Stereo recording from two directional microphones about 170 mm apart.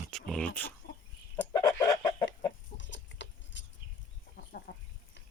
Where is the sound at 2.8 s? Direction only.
90° left.